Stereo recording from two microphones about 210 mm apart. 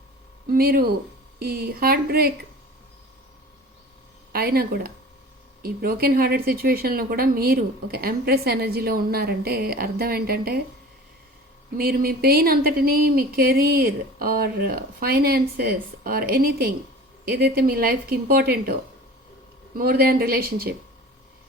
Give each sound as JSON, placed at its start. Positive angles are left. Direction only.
{"t": 0.5, "sound": "speech", "side_deg": -45}
{"t": 4.3, "sound": "speech", "side_deg": -45}
{"t": 11.8, "sound": "speech", "side_deg": -45}